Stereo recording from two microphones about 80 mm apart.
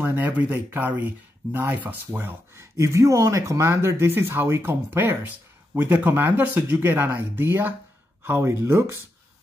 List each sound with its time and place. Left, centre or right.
0.0 s speech: right